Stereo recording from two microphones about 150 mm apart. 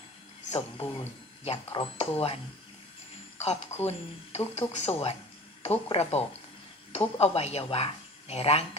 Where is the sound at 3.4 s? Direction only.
45° left (ahead or behind).